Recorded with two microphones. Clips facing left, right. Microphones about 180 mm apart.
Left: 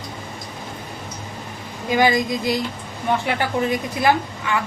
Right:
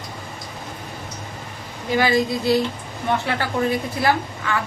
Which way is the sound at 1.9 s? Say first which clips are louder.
Left 1 dB; 15° left (ahead or behind).